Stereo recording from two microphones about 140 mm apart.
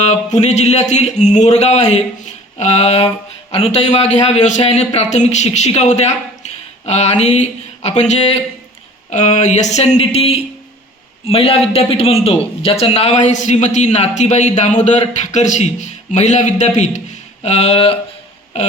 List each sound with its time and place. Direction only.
0.0 s a man's voice: 55° left (ahead or behind)